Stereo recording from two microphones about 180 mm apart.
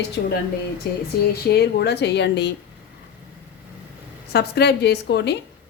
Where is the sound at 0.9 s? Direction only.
65° left (ahead or behind).